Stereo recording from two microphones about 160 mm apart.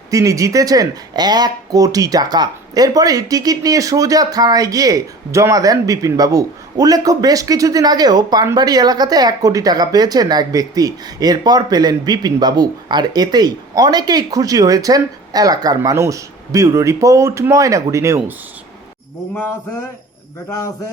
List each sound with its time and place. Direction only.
0.1 s speech: 20° right (ahead or behind)